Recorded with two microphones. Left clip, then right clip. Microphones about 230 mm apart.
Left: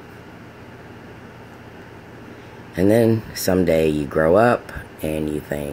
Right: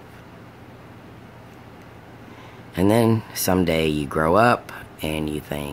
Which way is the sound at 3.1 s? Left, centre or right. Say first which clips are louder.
Left 2 dB; centre.